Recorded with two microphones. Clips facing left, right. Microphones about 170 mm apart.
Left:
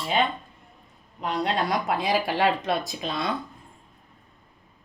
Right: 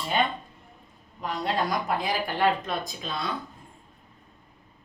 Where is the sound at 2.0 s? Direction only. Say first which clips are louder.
Left 3 dB; 80° left.